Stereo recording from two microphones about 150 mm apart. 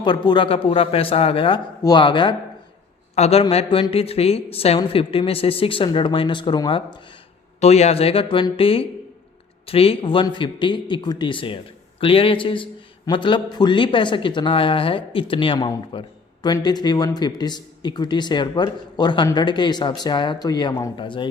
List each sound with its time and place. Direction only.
0.0 s speech: 30° left (ahead or behind)
3.2 s speech: 45° left (ahead or behind)
7.6 s speech: 45° left (ahead or behind)